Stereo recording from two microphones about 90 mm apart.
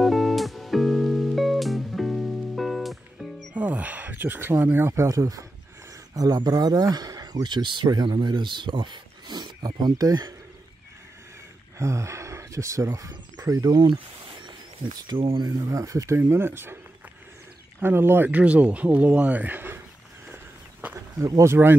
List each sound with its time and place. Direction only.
0.0 s music: centre (ahead or behind)
3.5 s speech: 15° right (ahead or behind)
5.0 s speech: 40° right (ahead or behind)
11.8 s speech: 35° right (ahead or behind); by 13.9 s 50° right (ahead or behind)
14.4 s a sound: 55° right (ahead or behind)
15.3 s speech: 45° right (ahead or behind)
16.2 s speech: 25° right (ahead or behind)
21.2 s speech: 35° right (ahead or behind)